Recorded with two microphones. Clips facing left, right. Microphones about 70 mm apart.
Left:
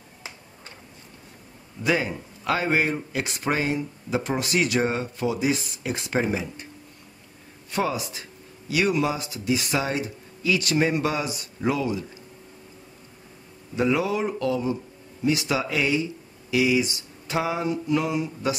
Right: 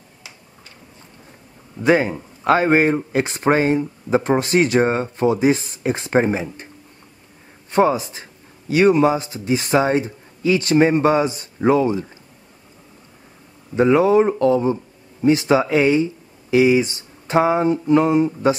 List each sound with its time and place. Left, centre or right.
1.8 s speech: right
7.7 s speech: right
13.7 s speech: right